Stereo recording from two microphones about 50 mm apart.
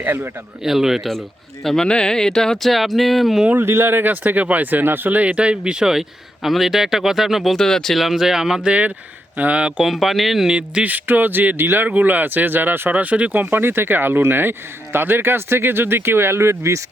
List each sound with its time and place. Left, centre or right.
0.0 s speech: right
0.6 s speech: centre
1.6 s speech: centre
3.7 s speech: right; by 7.5 s centre
7.5 s speech: centre
7.9 s speech: centre
9.4 s speech: right
9.8 s speech: centre
10.8 s speech: right
12.9 s speech: right